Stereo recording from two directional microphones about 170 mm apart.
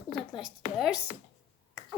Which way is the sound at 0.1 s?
Centre (ahead or behind).